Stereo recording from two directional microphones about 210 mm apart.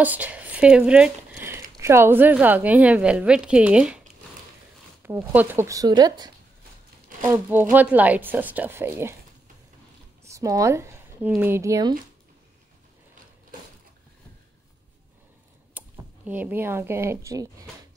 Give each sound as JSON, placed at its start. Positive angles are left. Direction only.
{"t": 0.0, "sound": "speech", "side_deg": -5}
{"t": 5.0, "sound": "speech", "side_deg": -10}
{"t": 7.2, "sound": "speech", "side_deg": -10}
{"t": 10.2, "sound": "speech", "side_deg": -15}
{"t": 15.8, "sound": "typing", "side_deg": -10}
{"t": 16.3, "sound": "speech", "side_deg": -10}